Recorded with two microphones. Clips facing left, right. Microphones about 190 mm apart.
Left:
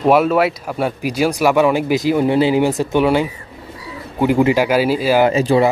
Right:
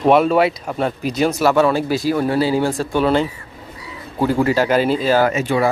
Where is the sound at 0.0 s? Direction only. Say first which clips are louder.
Even; 5° left (ahead or behind).